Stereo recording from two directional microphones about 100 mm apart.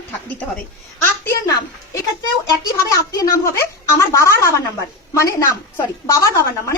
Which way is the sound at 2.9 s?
35° left (ahead or behind).